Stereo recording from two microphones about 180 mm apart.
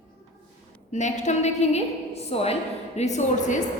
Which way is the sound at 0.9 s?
40° left (ahead or behind).